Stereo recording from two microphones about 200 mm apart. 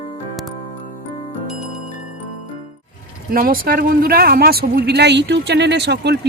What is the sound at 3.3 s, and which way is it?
Speech, 45° right (ahead or behind).